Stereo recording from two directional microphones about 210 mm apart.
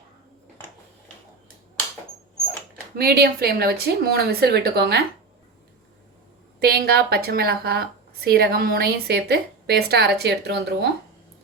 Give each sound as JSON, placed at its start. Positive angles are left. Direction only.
{"t": 2.9, "sound": "a woman's voice", "side_deg": -45}
{"t": 6.6, "sound": "a woman's voice", "side_deg": -45}